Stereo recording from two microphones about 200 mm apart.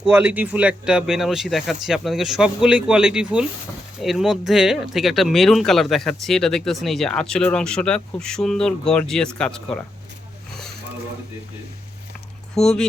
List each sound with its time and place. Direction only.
0.0 s speech: 5° right (ahead or behind)
12.6 s speech: 5° left (ahead or behind)